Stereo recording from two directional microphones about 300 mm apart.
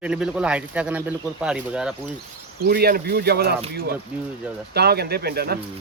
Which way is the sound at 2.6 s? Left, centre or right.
Right.